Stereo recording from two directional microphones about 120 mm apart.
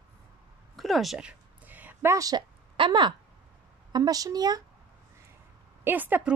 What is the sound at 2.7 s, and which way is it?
A woman's voice, 40° right (ahead or behind).